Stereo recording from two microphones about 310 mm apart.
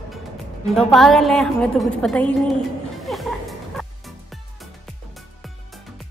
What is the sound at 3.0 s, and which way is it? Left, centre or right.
Music, centre.